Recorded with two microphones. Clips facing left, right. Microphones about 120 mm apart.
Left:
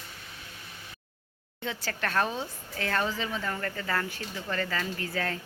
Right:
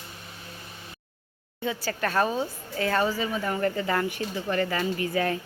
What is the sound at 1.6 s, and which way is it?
Speech, 5° right (ahead or behind).